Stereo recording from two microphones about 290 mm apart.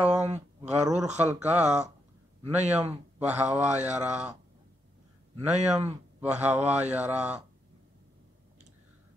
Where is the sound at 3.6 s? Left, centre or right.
Right.